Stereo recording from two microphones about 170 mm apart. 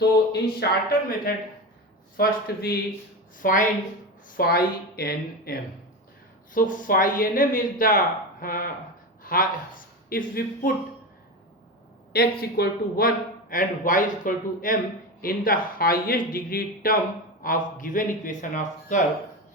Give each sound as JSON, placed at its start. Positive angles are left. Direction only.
{"t": 0.0, "sound": "a man's voice", "side_deg": 65}
{"t": 6.5, "sound": "a man's voice", "side_deg": 50}
{"t": 12.1, "sound": "a man's voice", "side_deg": 65}